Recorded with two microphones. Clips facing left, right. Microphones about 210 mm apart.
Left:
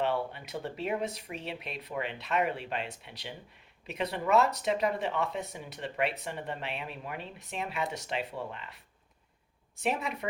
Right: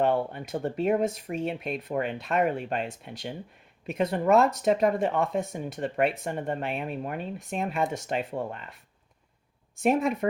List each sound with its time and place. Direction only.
0.0 s speech: 50° right (ahead or behind)